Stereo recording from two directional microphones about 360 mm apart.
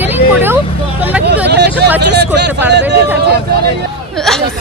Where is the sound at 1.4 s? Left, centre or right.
Right.